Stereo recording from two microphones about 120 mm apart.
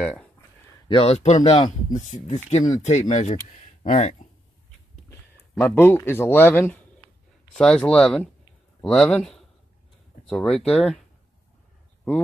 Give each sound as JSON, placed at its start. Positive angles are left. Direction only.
{"t": 0.0, "sound": "speech", "side_deg": 5}
{"t": 0.8, "sound": "speech", "side_deg": 50}
{"t": 1.9, "sound": "speech", "side_deg": 90}
{"t": 2.2, "sound": "speech", "side_deg": 75}
{"t": 5.8, "sound": "a man's voice", "side_deg": 20}